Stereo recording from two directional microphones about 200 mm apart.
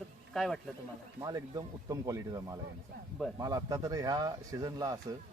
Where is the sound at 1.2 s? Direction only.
20° right (ahead or behind).